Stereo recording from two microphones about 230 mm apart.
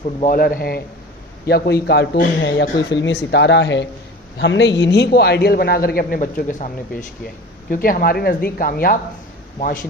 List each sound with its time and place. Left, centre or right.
0.2 s a man's voice: left